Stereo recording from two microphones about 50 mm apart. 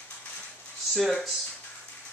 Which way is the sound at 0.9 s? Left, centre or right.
Centre.